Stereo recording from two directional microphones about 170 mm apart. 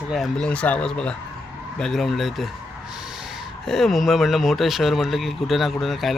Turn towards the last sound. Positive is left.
turn(degrees=0)  # may be behind; listen again after turning